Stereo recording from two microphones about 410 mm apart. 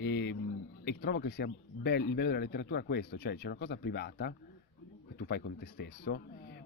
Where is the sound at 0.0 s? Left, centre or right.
Left.